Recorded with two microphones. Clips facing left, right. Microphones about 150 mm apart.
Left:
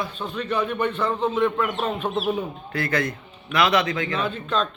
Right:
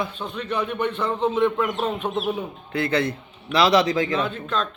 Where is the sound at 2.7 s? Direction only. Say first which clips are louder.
Right 4 dB; 25° right (ahead or behind).